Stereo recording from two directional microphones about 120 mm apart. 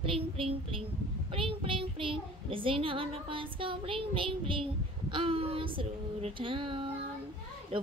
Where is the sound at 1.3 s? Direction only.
45° right (ahead or behind).